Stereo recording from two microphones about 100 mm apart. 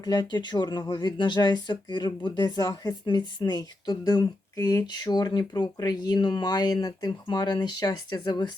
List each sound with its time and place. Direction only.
0.0 s speech: 40° left (ahead or behind)